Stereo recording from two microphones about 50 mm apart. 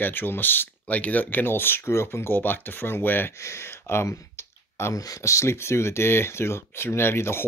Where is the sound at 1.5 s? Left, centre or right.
Left.